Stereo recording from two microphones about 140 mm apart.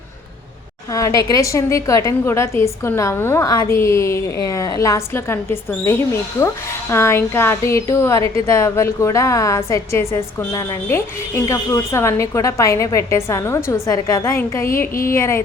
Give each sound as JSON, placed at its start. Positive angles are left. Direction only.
{"t": 0.9, "sound": "a woman's voice", "side_deg": 25}